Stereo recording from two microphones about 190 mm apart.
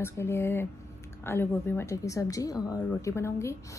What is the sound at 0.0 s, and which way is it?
Speech, 10° left (ahead or behind).